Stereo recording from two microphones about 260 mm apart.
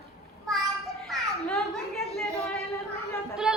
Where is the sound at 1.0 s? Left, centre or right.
Centre.